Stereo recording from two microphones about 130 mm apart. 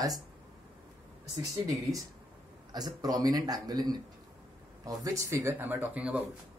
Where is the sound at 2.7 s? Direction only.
30° right (ahead or behind); by 6.2 s 10° right (ahead or behind).